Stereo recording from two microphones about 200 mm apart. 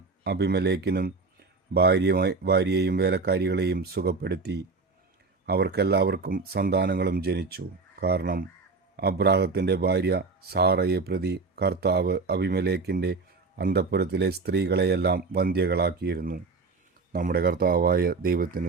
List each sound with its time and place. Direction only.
0.3 s speech: 55° right (ahead or behind)